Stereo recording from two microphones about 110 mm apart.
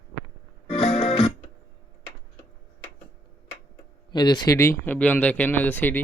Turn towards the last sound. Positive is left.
turn(degrees=15)  # may be behind; listen again after turning